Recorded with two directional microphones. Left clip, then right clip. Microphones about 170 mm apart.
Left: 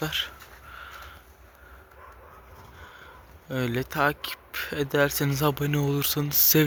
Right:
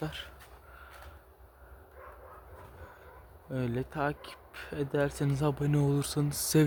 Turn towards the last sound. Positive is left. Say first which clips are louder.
# left 6 dB
turn(degrees=-10)  # may be behind; listen again after turning